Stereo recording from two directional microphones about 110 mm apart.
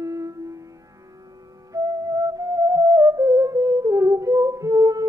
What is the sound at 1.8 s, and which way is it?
Music, 30° right (ahead or behind).